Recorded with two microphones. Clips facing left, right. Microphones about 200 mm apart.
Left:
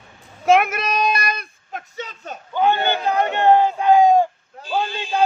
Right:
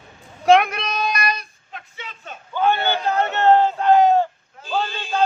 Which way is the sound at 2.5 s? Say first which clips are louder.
Left 1 dB; 15° left (ahead or behind).